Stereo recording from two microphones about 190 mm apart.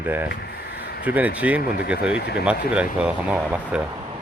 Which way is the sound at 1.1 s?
10° right (ahead or behind).